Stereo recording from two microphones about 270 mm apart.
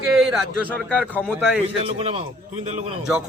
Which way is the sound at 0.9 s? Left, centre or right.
Centre.